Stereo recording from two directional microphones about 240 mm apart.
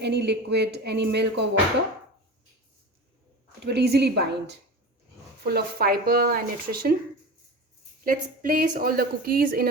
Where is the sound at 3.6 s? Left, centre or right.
Right.